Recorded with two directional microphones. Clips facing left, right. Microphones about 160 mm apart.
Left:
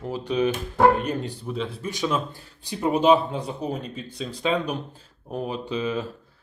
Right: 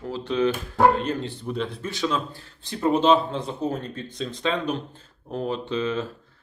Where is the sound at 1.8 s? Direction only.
15° left (ahead or behind).